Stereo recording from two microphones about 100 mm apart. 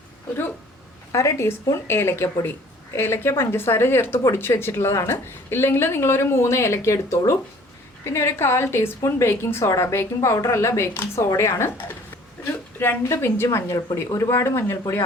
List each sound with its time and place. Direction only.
1.1 s speech: 30° left (ahead or behind)